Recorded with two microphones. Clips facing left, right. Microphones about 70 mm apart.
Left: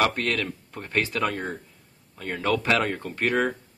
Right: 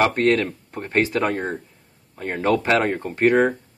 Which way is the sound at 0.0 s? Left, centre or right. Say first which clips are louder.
Right 6 dB; right.